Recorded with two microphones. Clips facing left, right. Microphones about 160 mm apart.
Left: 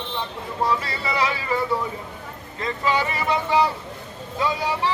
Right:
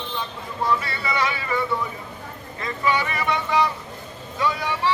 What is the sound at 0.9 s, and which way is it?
Speech, 35° left (ahead or behind).